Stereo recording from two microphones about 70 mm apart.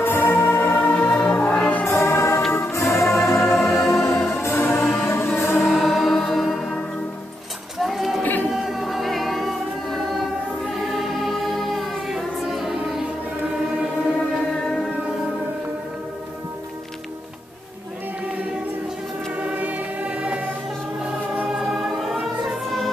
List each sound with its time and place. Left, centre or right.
0.0 s music: left
1.9 s music: left
5.8 s music: centre
7.8 s female singing: centre
8.6 s choir: centre
10.8 s music: centre
19.3 s choir: centre
21.5 s music: centre